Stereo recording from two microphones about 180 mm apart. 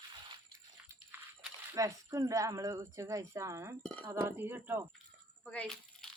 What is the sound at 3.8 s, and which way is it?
Speech, 10° left (ahead or behind).